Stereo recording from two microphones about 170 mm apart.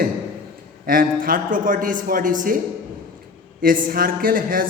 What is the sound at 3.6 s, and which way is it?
A man's voice, 55° right (ahead or behind).